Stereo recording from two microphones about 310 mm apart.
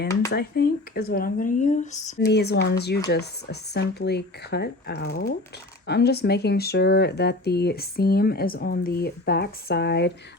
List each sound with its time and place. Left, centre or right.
0.3 s speech: left